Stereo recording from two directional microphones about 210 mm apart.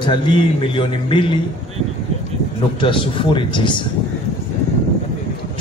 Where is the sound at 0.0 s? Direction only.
20° left (ahead or behind).